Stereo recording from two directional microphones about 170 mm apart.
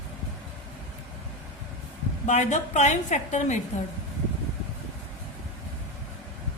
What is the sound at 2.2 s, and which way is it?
A woman's voice, 45° left (ahead or behind).